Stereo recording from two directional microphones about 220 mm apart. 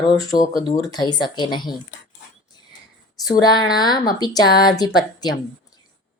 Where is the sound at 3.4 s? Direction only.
20° left (ahead or behind).